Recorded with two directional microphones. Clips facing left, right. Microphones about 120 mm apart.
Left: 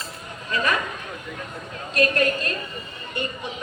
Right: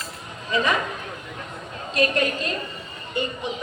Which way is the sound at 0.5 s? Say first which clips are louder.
Right 2 dB; 25° right (ahead or behind).